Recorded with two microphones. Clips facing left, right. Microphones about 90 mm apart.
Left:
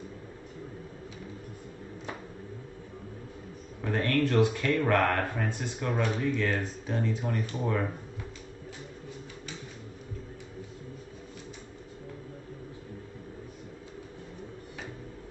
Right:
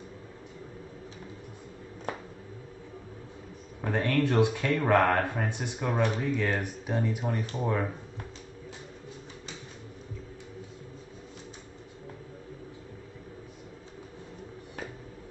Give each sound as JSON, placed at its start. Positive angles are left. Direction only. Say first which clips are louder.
{"t": 3.9, "sound": "speech", "louder": "even", "side_deg": -20}